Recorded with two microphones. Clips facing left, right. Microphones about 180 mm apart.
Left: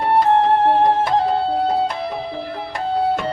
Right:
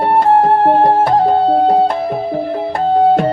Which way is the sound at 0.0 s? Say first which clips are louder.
Right 4 dB; 45° right (ahead or behind).